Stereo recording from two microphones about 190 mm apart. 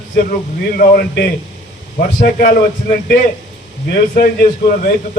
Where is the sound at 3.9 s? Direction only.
50° left (ahead or behind).